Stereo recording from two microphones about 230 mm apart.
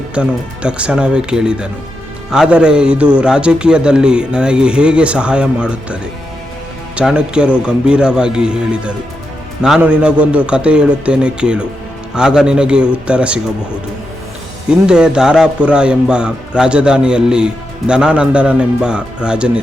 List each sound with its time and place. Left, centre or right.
0.1 s speech: centre
14.7 s speech: centre